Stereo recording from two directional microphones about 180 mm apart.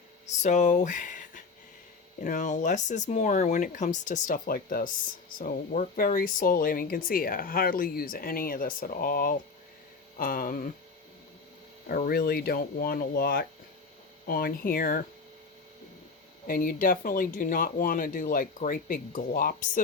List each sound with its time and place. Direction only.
0.4 s speech: 45° left (ahead or behind)
11.9 s speech: 55° left (ahead or behind)
16.5 s speech: 50° left (ahead or behind)